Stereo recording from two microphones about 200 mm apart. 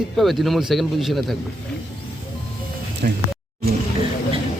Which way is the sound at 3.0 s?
45° right (ahead or behind).